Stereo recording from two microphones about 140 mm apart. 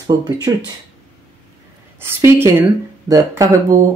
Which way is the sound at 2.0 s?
15° right (ahead or behind).